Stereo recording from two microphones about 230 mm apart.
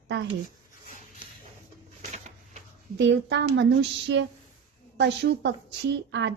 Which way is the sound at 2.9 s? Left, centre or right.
Right.